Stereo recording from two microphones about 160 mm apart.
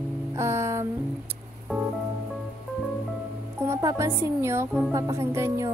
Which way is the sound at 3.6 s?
20° right (ahead or behind).